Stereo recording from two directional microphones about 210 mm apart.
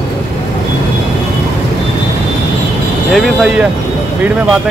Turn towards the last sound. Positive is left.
turn(degrees=-5)  # may be behind; listen again after turning